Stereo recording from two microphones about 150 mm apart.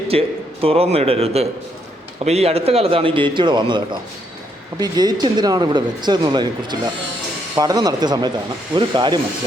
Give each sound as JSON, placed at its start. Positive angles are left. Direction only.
{"t": 0.1, "sound": "a man's voice", "side_deg": -40}